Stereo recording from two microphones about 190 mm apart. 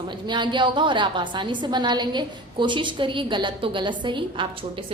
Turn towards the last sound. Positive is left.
turn(degrees=-25)  # may be behind; listen again after turning